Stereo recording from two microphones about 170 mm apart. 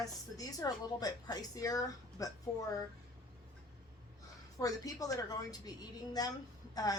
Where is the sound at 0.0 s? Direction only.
20° left (ahead or behind).